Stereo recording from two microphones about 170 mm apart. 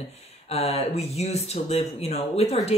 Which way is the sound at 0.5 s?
40° left (ahead or behind).